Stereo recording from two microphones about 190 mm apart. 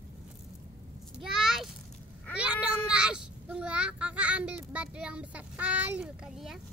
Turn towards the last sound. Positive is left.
turn(degrees=0)  # may be behind; listen again after turning